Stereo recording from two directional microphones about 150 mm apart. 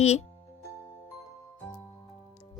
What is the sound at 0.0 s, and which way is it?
Speech, 45° left (ahead or behind).